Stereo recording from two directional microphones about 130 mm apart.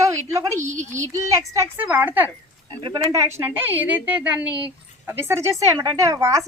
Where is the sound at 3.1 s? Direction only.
25° right (ahead or behind).